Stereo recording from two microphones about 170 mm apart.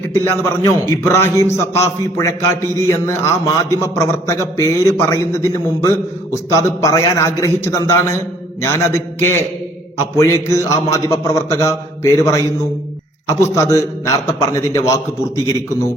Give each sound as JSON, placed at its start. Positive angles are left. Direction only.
{"t": 0.1, "sound": "a man's voice", "side_deg": 15}